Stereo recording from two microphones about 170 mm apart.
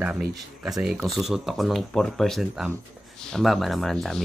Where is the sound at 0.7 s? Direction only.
Centre (ahead or behind).